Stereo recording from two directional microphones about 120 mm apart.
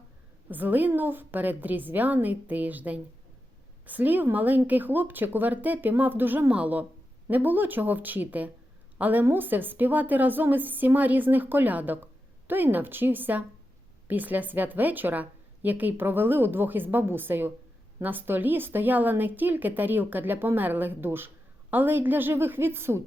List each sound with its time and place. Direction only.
0.5 s a woman's voice: 15° right (ahead or behind)